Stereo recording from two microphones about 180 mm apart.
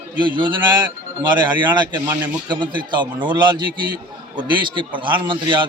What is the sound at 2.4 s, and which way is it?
A man's voice, 25° right (ahead or behind).